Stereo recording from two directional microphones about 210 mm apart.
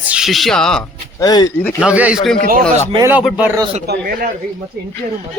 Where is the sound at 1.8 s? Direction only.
5° right (ahead or behind).